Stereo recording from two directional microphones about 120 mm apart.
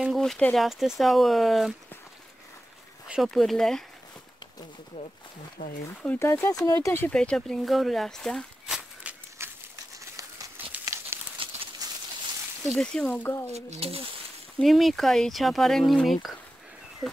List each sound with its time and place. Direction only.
0.2 s speech: 10° left (ahead or behind)
3.1 s speech: centre (ahead or behind)
5.6 s speech: 90° left
6.0 s speech: 20° left (ahead or behind)
7.2 s speech: 5° left (ahead or behind)
9.4 s a sound: 20° right (ahead or behind)
11.4 s a sound: 45° right (ahead or behind)
12.6 s speech: 5° left (ahead or behind)
13.5 s speech: 65° right (ahead or behind)
14.6 s speech: centre (ahead or behind)